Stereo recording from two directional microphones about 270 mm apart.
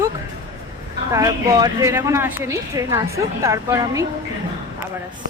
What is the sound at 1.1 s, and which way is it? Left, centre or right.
A woman's voice, centre.